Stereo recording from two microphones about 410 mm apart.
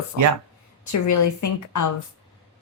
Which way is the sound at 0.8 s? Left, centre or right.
Left.